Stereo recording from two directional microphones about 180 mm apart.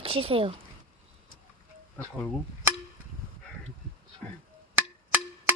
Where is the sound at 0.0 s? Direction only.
30° right (ahead or behind).